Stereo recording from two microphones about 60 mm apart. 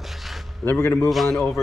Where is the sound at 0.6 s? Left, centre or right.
Left.